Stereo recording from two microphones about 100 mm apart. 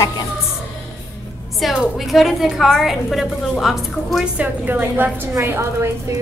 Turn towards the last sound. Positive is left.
turn(degrees=-25)  # may be behind; listen again after turning